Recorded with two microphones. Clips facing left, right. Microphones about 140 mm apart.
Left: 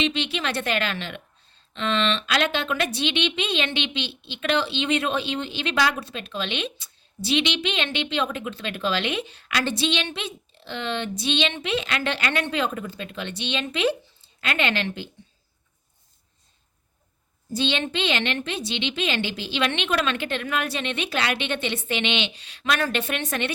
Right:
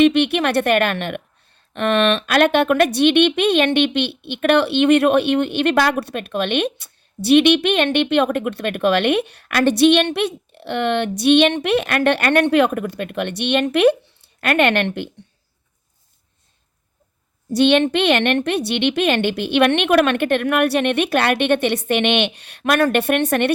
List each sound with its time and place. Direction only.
0.0 s a woman's voice: 60° right (ahead or behind)
17.5 s a woman's voice: 65° right (ahead or behind)